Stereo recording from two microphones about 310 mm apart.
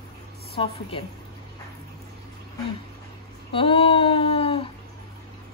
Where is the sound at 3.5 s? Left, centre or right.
Centre.